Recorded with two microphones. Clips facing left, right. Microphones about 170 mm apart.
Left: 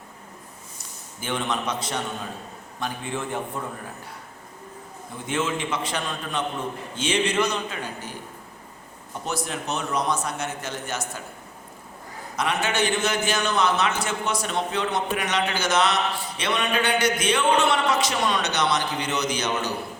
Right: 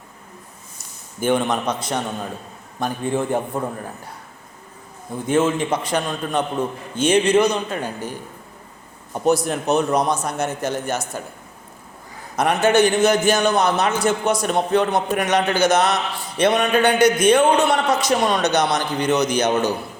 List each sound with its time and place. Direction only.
1.2 s a man's voice: 50° right (ahead or behind)
5.2 s a man's voice: 40° right (ahead or behind)
9.2 s a man's voice: 40° right (ahead or behind)
12.4 s a man's voice: 45° right (ahead or behind)